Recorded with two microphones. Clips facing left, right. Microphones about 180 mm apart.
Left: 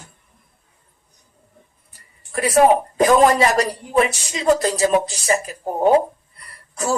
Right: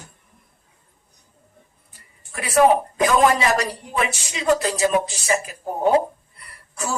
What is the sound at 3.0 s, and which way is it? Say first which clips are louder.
Speech: left 4 dB; 35° left (ahead or behind).